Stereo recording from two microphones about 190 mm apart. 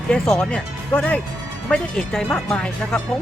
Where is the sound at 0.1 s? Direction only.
5° left (ahead or behind).